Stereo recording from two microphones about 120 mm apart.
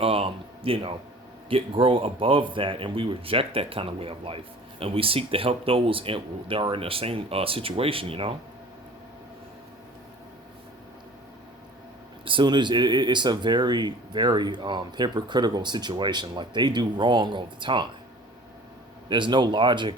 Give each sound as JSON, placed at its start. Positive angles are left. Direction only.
{"t": 0.0, "sound": "a sound", "side_deg": -50}
{"t": 1.5, "sound": "speech", "side_deg": -50}
{"t": 12.2, "sound": "speech", "side_deg": -45}
{"t": 19.0, "sound": "speech", "side_deg": -40}